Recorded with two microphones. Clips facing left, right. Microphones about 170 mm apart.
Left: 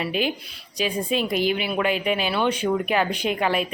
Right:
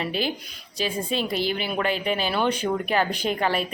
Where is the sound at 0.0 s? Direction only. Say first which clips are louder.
Left 2 dB; 35° right (ahead or behind).